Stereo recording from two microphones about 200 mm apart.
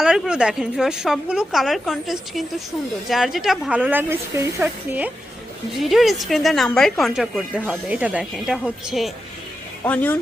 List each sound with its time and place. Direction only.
0.0 s a woman's voice: 5° right (ahead or behind)